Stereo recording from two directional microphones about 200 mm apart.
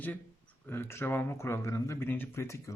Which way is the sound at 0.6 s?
10° left (ahead or behind).